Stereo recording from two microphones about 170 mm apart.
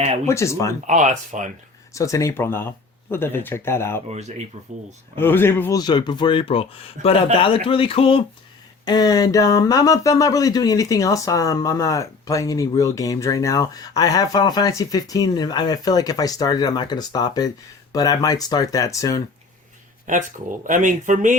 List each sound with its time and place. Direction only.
0.3 s speech: 15° left (ahead or behind)
0.9 s speech: 45° right (ahead or behind)
1.9 s speech: 20° left (ahead or behind)
4.1 s speech: 40° right (ahead or behind)
5.1 s speech: 15° left (ahead or behind)
5.8 s speech: 25° left (ahead or behind)
20.1 s speech: 50° right (ahead or behind)